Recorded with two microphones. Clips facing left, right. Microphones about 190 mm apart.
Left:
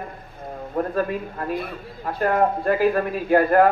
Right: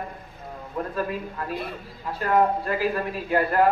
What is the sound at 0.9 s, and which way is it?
A man's voice, 50° left (ahead or behind).